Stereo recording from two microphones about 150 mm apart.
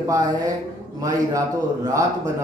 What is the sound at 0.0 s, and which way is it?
Speech, 25° right (ahead or behind).